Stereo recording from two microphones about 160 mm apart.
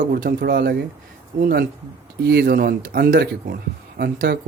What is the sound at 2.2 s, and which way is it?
Speech, 85° right.